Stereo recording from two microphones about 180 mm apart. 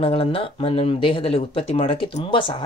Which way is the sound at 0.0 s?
30° left (ahead or behind).